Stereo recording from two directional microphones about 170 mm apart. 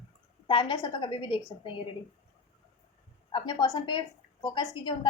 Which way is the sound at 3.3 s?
25° left (ahead or behind).